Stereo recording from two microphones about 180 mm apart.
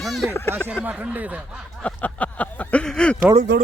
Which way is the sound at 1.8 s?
10° left (ahead or behind).